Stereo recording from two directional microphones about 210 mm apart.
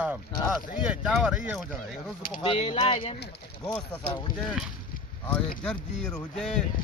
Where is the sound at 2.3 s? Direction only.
25° left (ahead or behind).